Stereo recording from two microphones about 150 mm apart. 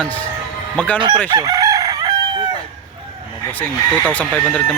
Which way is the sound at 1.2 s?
25° right (ahead or behind).